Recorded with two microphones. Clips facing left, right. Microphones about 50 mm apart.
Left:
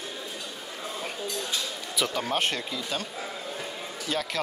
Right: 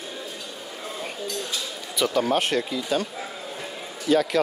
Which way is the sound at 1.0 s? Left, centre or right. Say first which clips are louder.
Right 2 dB; centre.